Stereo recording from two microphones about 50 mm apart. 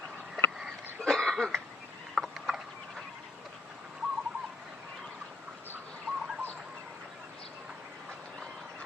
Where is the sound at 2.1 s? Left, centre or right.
Centre.